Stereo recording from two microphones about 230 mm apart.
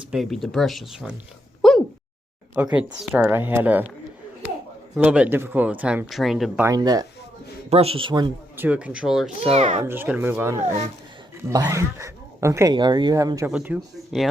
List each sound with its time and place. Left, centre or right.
0.0 s speech: centre
1.6 s a sound: centre
2.7 s speech: centre
4.9 s speech: centre
6.7 s speech: centre
9.4 s speech: right
9.8 s speech: centre